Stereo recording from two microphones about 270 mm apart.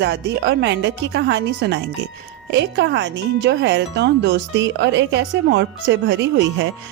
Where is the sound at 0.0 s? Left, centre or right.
Right.